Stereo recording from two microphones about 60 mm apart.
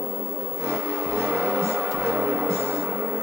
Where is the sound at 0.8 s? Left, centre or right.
Centre.